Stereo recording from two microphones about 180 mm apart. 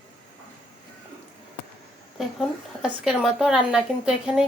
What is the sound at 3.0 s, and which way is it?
A woman's voice, 5° right (ahead or behind).